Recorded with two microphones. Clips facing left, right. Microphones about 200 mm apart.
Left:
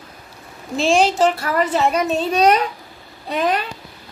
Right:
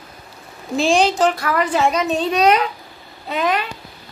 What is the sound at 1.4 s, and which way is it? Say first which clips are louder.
Speech: even; 30° left (ahead or behind).